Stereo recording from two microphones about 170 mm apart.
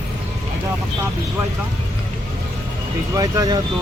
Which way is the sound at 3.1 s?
20° right (ahead or behind).